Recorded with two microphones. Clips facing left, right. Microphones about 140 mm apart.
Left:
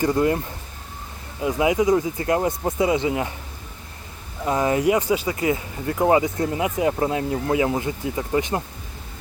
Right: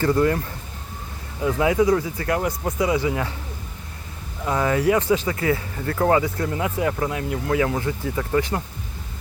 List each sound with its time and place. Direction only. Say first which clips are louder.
0.0 s speech: even; 20° left (ahead or behind)
4.4 s speech: left 1 dB; 20° left (ahead or behind)